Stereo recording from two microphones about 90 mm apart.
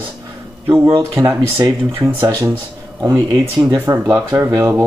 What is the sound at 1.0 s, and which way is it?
Speech, 35° right (ahead or behind).